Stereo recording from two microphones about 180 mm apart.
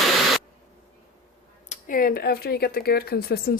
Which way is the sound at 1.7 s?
50° left (ahead or behind).